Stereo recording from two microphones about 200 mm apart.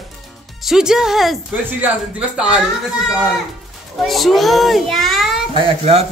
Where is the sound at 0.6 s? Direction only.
Centre (ahead or behind).